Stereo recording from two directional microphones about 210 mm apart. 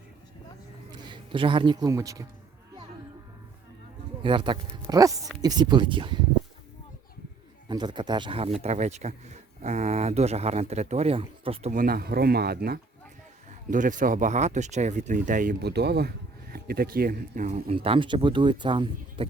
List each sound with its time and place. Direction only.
0.9 s a man's voice: 20° right (ahead or behind)
4.2 s speech: 25° right (ahead or behind)
7.7 s speech: 20° right (ahead or behind); by 12.8 s 50° right (ahead or behind)
13.5 s speech: 40° right (ahead or behind)